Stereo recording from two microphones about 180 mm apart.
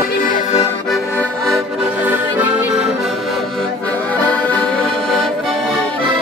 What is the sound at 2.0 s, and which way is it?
Music, 10° right (ahead or behind).